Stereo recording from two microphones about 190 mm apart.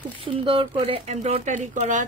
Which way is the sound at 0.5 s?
30° right (ahead or behind).